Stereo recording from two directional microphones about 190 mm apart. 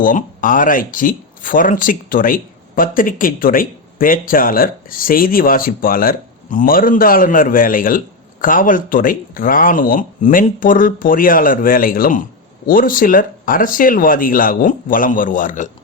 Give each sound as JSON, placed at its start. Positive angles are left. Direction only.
{"t": 0.0, "sound": "speech", "side_deg": 45}